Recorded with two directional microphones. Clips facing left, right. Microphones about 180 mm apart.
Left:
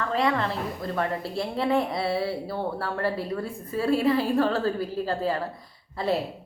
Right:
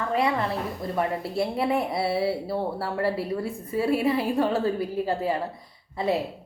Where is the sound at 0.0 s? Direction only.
15° right (ahead or behind).